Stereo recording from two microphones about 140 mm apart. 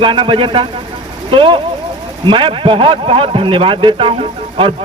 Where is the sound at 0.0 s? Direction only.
35° right (ahead or behind).